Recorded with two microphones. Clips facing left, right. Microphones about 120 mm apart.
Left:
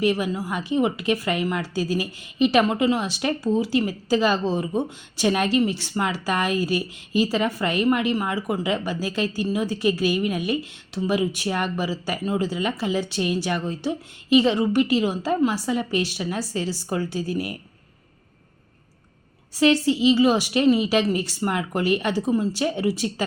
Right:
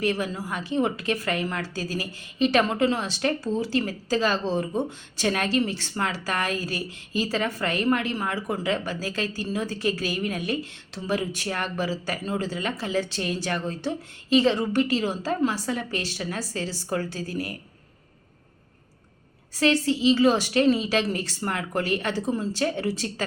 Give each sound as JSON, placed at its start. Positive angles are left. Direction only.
{"t": 0.0, "sound": "a woman's voice", "side_deg": 15}
{"t": 19.5, "sound": "a woman's voice", "side_deg": 15}